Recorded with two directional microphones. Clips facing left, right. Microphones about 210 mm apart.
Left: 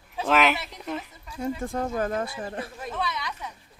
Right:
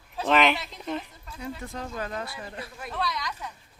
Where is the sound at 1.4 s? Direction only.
45° left (ahead or behind).